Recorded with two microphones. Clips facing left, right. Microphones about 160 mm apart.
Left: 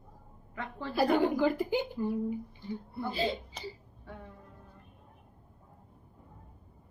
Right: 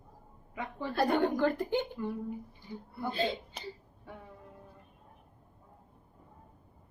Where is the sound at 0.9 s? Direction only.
5° left (ahead or behind).